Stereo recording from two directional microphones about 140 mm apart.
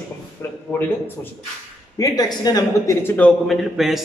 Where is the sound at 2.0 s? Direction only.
30° left (ahead or behind).